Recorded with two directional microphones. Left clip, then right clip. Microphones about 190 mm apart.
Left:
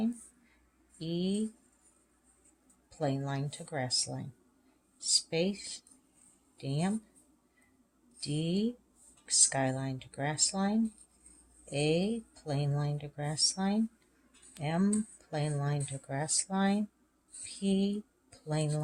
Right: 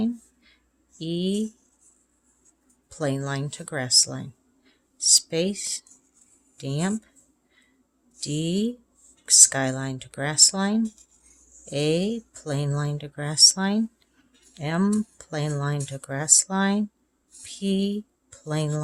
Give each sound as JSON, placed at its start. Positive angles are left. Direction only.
{"t": 0.9, "sound": "speech", "side_deg": -30}
{"t": 3.0, "sound": "speech", "side_deg": -30}
{"t": 8.2, "sound": "speech", "side_deg": -25}
{"t": 17.4, "sound": "a sound", "side_deg": -25}